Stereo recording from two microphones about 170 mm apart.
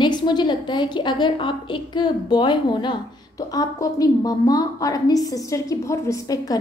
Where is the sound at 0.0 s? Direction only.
25° left (ahead or behind).